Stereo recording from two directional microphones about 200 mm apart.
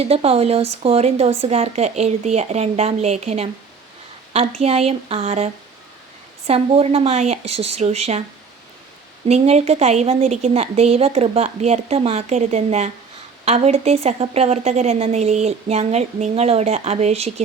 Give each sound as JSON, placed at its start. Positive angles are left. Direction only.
{"t": 0.0, "sound": "a woman's voice", "side_deg": -30}
{"t": 6.5, "sound": "a woman's voice", "side_deg": -30}
{"t": 9.2, "sound": "a woman's voice", "side_deg": -30}